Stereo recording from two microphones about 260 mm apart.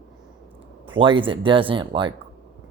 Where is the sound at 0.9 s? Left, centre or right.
Centre.